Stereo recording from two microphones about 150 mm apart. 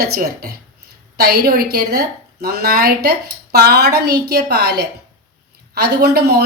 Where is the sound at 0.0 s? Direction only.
90° right.